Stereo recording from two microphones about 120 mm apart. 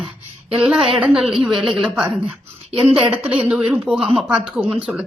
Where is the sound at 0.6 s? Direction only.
5° right (ahead or behind).